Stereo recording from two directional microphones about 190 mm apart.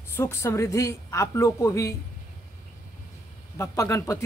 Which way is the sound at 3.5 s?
15° left (ahead or behind).